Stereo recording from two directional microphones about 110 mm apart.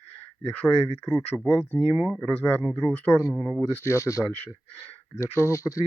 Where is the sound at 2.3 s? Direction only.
15° left (ahead or behind).